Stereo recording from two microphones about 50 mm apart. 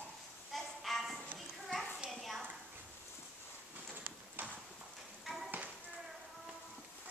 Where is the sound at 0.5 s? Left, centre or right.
Centre.